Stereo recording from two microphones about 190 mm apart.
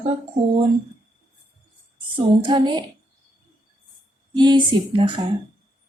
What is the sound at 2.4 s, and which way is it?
Speech, 25° right (ahead or behind).